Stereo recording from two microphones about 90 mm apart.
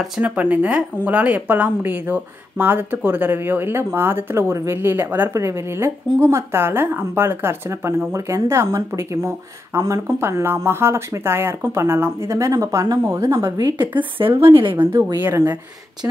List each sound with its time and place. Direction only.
0.2 s speech: 15° right (ahead or behind)
5.3 s speech: 35° right (ahead or behind)
13.9 s a woman's voice: 75° right (ahead or behind)
15.1 s speech: 25° right (ahead or behind)